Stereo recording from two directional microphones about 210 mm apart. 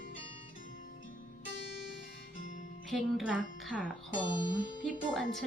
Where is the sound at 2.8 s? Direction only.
Centre (ahead or behind).